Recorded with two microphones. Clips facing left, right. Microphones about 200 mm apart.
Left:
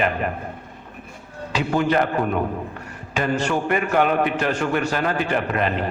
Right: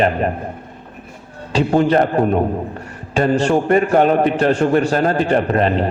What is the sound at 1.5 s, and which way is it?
A man's voice, 30° right (ahead or behind).